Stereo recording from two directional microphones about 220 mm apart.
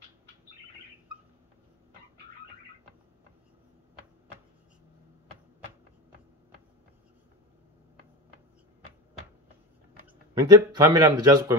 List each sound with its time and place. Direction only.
10.4 s speech: 15° right (ahead or behind)